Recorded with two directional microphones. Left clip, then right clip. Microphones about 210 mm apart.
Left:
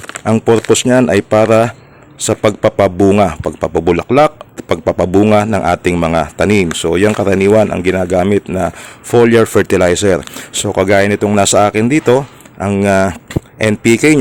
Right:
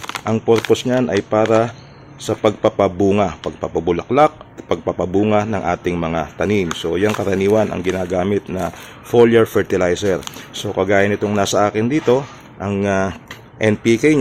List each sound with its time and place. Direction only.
0.3 s speech: 40° left (ahead or behind)